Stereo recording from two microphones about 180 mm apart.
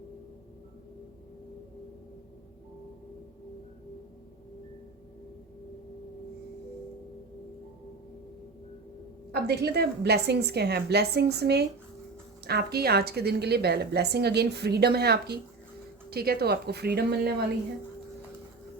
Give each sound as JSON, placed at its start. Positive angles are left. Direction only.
{"t": 9.3, "sound": "a woman's voice", "side_deg": -65}